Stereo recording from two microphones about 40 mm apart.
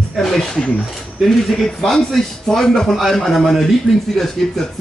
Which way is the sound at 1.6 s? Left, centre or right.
Centre.